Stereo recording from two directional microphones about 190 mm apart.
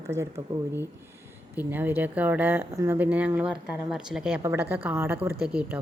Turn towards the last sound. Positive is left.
turn(degrees=-5)  # may be behind; listen again after turning